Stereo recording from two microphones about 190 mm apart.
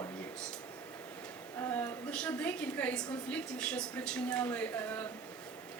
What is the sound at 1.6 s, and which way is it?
A woman's voice, 10° left (ahead or behind).